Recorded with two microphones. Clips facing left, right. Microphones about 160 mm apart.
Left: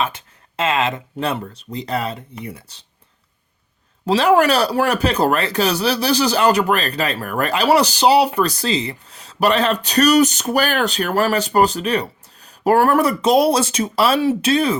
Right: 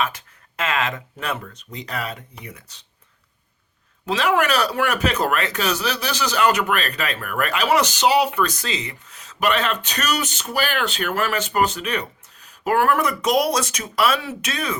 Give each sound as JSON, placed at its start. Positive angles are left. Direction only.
{"t": 0.0, "sound": "speech", "side_deg": 25}
{"t": 4.0, "sound": "speech", "side_deg": 35}